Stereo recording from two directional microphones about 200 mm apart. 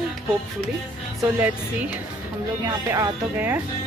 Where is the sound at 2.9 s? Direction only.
10° right (ahead or behind).